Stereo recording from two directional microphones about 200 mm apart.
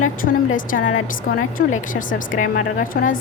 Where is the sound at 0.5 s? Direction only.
40° left (ahead or behind).